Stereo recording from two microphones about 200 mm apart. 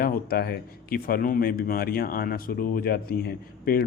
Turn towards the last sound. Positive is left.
turn(degrees=50)  # may be behind; listen again after turning